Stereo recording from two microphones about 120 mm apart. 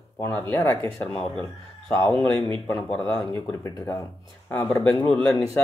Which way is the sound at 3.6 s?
25° left (ahead or behind).